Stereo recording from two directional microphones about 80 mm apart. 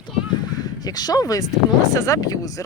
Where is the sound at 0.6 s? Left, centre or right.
Left.